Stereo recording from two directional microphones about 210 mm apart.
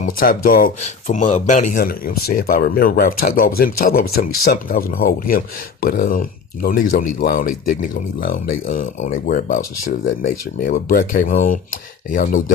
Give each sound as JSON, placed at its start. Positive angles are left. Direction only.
{"t": 0.0, "sound": "speech", "side_deg": 45}